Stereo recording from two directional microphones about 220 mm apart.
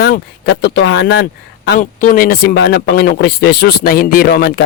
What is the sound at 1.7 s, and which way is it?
A man's voice, 40° left (ahead or behind).